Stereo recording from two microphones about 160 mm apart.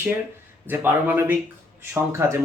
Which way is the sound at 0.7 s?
10° right (ahead or behind).